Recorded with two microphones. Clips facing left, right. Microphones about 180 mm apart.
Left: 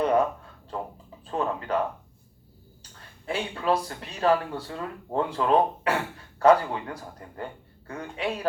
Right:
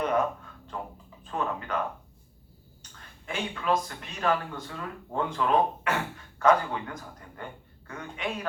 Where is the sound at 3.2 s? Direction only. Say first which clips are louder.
Left 3 dB; 35° left (ahead or behind).